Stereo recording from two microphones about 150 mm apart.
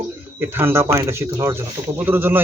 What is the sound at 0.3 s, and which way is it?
Speech, 15° right (ahead or behind).